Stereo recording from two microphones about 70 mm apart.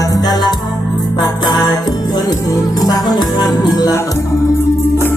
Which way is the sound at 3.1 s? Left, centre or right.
Left.